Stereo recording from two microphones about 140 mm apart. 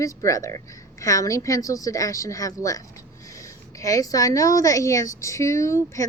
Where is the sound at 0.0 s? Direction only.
20° left (ahead or behind).